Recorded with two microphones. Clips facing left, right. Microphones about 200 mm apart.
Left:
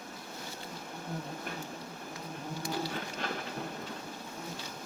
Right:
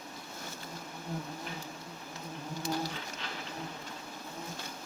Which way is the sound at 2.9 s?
50° left (ahead or behind).